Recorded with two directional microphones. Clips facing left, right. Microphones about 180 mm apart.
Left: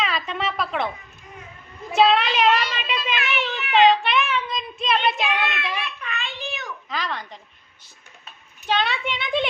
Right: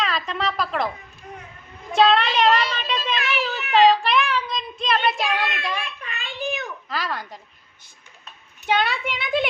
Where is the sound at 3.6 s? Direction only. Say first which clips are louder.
Right 1 dB; 40° right (ahead or behind).